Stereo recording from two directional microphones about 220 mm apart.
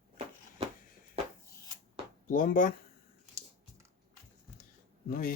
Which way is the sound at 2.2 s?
40° left (ahead or behind).